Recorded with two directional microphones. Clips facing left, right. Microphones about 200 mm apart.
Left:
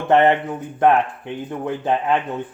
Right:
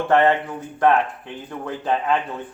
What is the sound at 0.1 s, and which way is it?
Speech, 20° left (ahead or behind).